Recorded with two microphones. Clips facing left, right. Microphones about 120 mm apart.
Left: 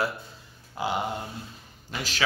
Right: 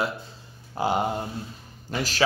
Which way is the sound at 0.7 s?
40° right (ahead or behind).